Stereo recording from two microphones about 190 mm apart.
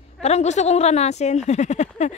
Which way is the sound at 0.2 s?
35° left (ahead or behind).